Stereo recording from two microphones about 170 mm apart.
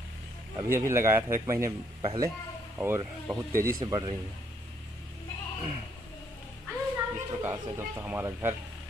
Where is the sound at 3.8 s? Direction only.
25° right (ahead or behind).